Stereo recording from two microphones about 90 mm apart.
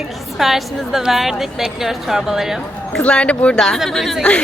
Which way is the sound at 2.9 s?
10° left (ahead or behind).